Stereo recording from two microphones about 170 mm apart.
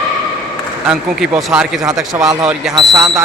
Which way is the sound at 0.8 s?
Centre (ahead or behind).